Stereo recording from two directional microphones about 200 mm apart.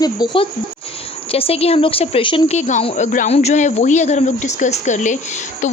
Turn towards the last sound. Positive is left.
turn(degrees=35)  # may be behind; listen again after turning